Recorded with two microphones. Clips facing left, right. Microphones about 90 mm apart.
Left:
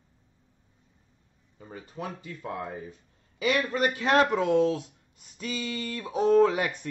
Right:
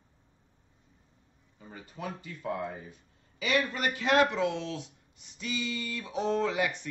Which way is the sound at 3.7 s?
40° left (ahead or behind).